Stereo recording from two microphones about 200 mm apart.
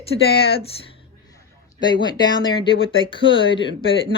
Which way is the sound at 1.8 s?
20° left (ahead or behind).